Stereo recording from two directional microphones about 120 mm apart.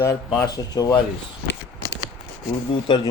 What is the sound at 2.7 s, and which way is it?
Speech, 40° left (ahead or behind).